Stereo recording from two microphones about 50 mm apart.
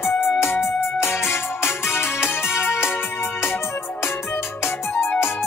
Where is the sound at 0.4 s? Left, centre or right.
Left.